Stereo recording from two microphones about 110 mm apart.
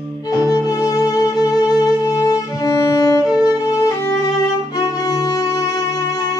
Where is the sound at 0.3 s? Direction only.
30° left (ahead or behind).